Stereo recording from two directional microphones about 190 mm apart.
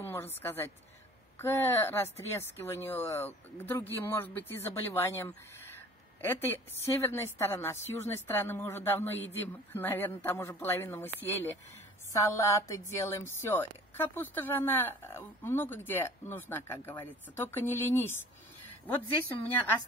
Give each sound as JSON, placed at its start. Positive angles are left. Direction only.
{"t": 0.0, "sound": "a woman's voice", "side_deg": 10}
{"t": 19.2, "sound": "speech", "side_deg": 10}